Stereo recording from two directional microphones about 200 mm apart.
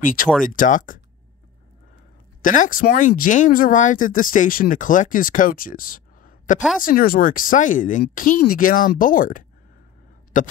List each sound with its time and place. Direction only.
0.0 s speech: 45° left (ahead or behind)
2.4 s a man's voice: 40° left (ahead or behind)